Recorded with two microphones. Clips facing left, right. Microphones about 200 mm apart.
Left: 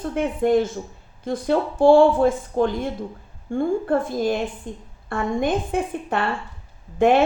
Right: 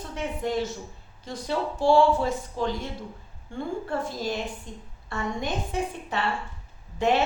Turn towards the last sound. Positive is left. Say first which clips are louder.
# left 7 dB
turn(degrees=50)  # may be behind; listen again after turning